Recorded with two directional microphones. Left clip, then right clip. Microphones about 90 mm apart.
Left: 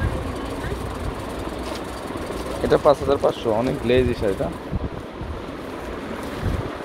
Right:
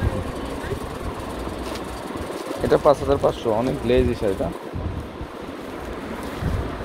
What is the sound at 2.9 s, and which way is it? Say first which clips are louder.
Speech: left 1 dB; 20° right (ahead or behind).